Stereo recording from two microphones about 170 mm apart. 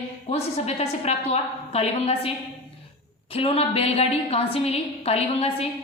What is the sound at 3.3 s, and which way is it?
A woman's voice, 35° left (ahead or behind).